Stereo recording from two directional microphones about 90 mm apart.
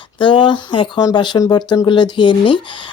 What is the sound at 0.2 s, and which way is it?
Speech, 65° left (ahead or behind).